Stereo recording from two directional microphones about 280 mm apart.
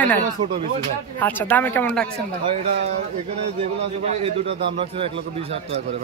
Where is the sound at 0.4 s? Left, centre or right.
Right.